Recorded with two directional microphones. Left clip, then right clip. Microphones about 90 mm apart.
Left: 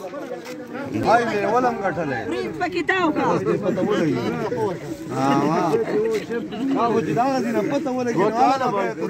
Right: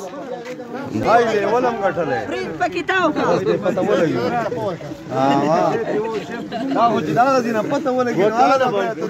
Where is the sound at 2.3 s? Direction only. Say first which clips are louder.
Right 3 dB; 25° right (ahead or behind).